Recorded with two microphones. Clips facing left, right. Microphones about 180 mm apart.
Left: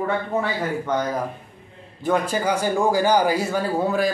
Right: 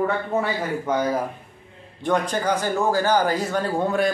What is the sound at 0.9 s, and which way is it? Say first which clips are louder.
Speech: right 3 dB; 10° right (ahead or behind).